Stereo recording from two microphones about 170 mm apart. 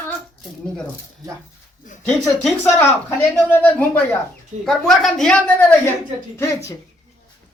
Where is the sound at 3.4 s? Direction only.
10° left (ahead or behind).